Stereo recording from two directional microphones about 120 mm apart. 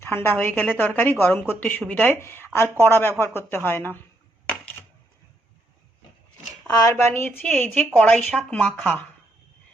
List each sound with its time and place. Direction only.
0.0 s a woman's voice: 20° left (ahead or behind)
2.1 s a woman's voice: 20° left (ahead or behind)
6.7 s a woman's voice: 25° left (ahead or behind)